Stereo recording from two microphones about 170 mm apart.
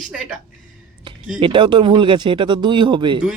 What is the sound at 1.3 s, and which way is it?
Speech, 30° right (ahead or behind).